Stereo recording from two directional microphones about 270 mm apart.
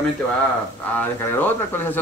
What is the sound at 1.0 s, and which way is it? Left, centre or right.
Speech, centre.